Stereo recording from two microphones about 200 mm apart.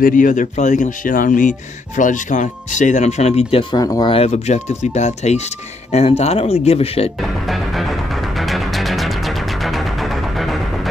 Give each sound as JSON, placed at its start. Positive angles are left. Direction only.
{"t": 0.0, "sound": "speech", "side_deg": 40}
{"t": 7.2, "sound": "music", "side_deg": 0}